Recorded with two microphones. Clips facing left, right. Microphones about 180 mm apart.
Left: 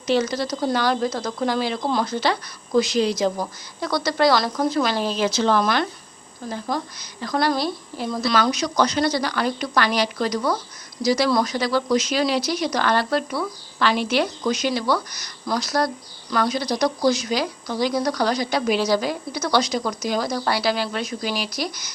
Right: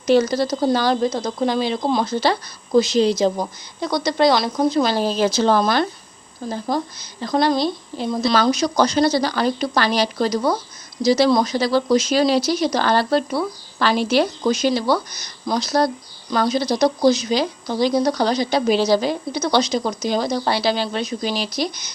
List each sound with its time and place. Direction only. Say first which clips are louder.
0.1 s speech: right 5 dB; 40° right (ahead or behind); by 2.1 s 20° right (ahead or behind)
2.1 s speech: right 3 dB; 30° right (ahead or behind)
4.9 s speech: right 3 dB; 35° right (ahead or behind)
8.3 s speech: right 3 dB; 30° right (ahead or behind)